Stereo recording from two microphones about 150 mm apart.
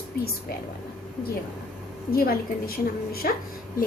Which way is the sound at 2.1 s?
85° left.